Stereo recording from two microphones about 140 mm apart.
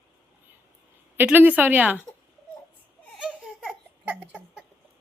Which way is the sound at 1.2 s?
15° right (ahead or behind).